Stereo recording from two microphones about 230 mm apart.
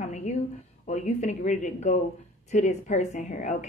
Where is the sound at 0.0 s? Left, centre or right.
Left.